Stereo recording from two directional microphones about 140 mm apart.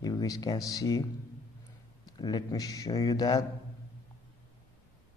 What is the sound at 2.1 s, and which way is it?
A man's voice, 30° left (ahead or behind).